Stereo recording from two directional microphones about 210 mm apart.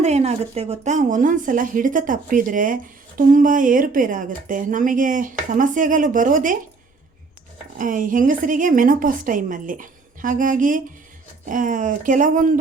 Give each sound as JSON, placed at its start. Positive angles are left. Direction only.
{"t": 0.0, "sound": "a woman's voice", "side_deg": -30}
{"t": 7.8, "sound": "a woman's voice", "side_deg": -40}